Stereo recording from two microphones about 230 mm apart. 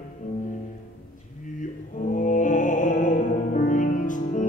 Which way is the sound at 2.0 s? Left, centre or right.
Left.